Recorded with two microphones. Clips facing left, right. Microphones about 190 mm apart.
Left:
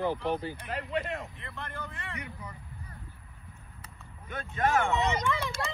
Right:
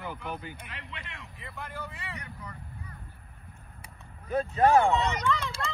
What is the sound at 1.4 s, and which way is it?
Speech, 5° right (ahead or behind).